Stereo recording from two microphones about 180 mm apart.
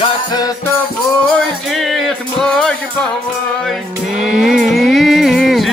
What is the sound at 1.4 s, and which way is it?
Music, centre (ahead or behind).